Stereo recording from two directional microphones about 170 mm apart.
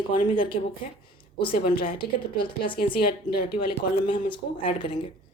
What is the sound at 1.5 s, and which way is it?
Speech, 65° left (ahead or behind).